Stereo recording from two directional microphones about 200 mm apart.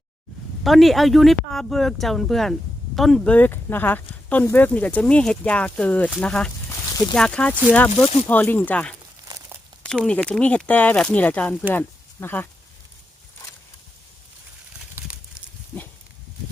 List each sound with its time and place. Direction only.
0.6 s speech: centre (ahead or behind)
9.2 s crumpling: 15° right (ahead or behind)
9.8 s speech: 5° left (ahead or behind)
15.0 s a sound: 10° right (ahead or behind)